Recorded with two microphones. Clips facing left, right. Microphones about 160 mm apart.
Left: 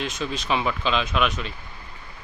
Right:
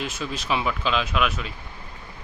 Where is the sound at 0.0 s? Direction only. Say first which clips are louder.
Left 2 dB; 5° right (ahead or behind).